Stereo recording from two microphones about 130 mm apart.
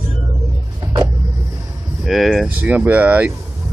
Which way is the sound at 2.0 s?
Centre (ahead or behind).